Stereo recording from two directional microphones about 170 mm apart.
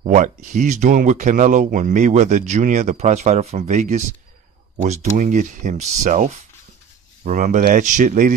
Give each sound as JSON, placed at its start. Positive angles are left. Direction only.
{"t": 0.0, "sound": "speech", "side_deg": -45}